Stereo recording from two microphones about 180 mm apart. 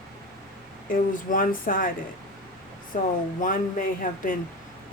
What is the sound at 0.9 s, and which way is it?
Speech, 50° left (ahead or behind).